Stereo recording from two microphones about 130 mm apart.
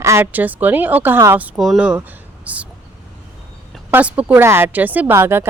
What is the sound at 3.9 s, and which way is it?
Speech, 10° right (ahead or behind).